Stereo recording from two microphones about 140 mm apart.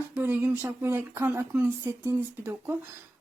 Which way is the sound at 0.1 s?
15° right (ahead or behind).